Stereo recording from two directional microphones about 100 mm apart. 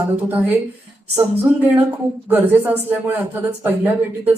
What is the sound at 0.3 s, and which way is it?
Speech, 15° right (ahead or behind).